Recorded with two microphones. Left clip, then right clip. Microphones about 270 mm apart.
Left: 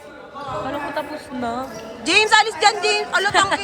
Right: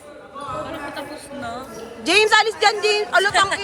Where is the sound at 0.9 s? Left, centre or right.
Left.